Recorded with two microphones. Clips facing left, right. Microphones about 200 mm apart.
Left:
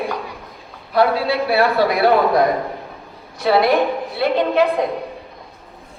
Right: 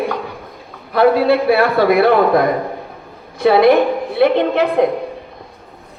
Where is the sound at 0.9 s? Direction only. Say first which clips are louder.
Right 5 dB; 55° right (ahead or behind).